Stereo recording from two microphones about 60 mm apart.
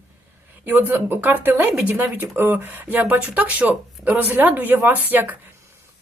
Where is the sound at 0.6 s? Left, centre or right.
Right.